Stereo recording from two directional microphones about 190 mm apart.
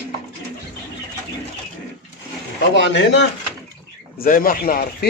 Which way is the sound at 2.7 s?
65° left (ahead or behind).